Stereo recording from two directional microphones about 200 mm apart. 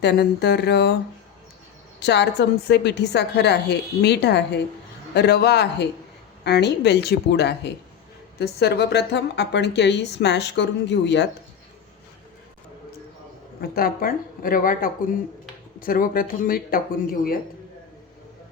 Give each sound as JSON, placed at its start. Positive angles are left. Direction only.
{"t": 0.0, "sound": "speech", "side_deg": 55}
{"t": 2.0, "sound": "speech", "side_deg": 60}
{"t": 13.6, "sound": "speech", "side_deg": 50}